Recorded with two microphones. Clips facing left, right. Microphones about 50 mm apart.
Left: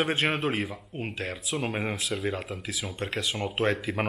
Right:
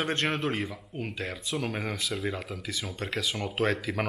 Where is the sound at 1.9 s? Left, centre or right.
Centre.